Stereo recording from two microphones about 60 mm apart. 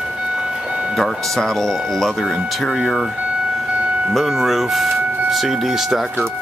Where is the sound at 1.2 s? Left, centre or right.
Centre.